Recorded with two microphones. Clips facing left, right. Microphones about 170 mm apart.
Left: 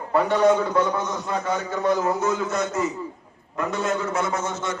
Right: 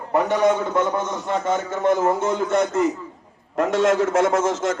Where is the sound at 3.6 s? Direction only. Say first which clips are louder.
Right 7 dB; 90° right.